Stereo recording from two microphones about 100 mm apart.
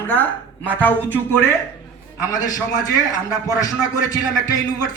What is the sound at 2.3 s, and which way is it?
A man's voice, 40° left (ahead or behind).